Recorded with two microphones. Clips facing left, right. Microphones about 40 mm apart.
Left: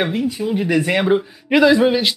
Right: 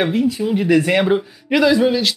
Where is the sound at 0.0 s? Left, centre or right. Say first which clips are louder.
Right 2 dB; centre.